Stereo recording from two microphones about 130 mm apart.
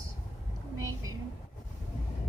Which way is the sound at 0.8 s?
25° right (ahead or behind).